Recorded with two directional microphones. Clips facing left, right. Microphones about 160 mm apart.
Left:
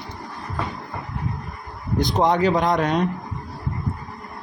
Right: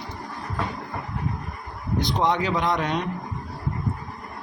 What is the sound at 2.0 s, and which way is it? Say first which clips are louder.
A man's voice: left 4 dB; 45° left (ahead or behind).